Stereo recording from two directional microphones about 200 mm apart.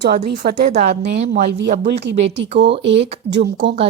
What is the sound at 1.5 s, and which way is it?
Speech, 55° right (ahead or behind).